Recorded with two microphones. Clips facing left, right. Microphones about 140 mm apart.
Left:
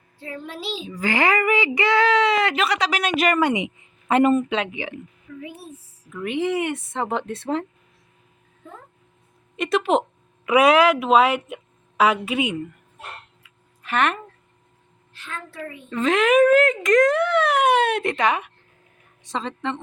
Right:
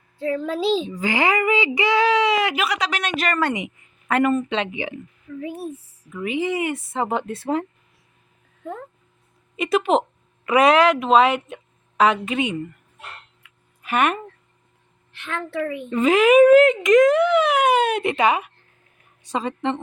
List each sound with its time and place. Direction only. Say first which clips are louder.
0.9 s speech: even; 20° right (ahead or behind)
2.6 s speech: left 2 dB; 5° right (ahead or behind)
3.2 s a woman's voice: left 3 dB; 15° left (ahead or behind)
4.4 s speech: even; 5° left (ahead or behind)
5.4 s speech: right 8 dB; 45° right (ahead or behind)
6.1 s speech: even; centre (ahead or behind)
8.6 s speech: right 10 dB; 60° right (ahead or behind)
9.6 s a woman's voice: right 1 dB; centre (ahead or behind)
13.4 s a sound: even; 60° right (ahead or behind)
13.8 s speech: right 1 dB; 10° right (ahead or behind)
15.1 s a woman's voice: right 8 dB; 65° right (ahead or behind)
15.9 s speech: right 3 dB; 10° right (ahead or behind)